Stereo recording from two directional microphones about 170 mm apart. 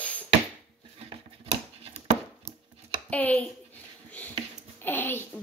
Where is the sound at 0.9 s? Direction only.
35° right (ahead or behind).